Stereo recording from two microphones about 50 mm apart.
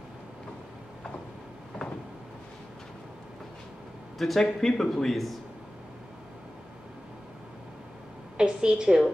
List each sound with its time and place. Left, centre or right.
4.4 s speech: centre
8.4 s a woman's voice: centre